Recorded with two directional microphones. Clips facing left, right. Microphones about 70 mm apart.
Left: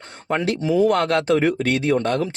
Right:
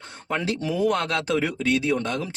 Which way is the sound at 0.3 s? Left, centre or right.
Left.